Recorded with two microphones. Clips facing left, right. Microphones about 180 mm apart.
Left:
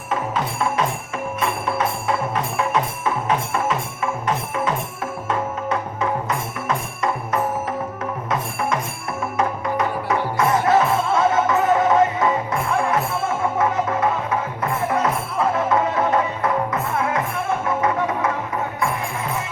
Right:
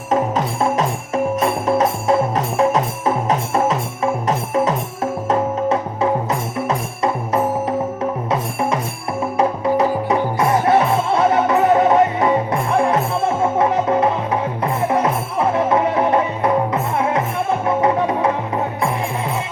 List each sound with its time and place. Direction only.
0.1 s music: 40° right (ahead or behind)
8.3 s music: 30° right (ahead or behind)